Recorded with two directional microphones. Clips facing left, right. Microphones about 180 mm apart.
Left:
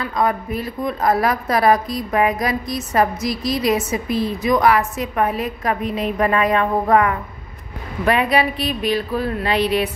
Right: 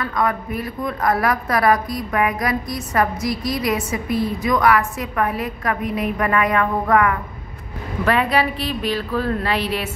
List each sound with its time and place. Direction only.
0.0 s a woman's voice: 25° left (ahead or behind)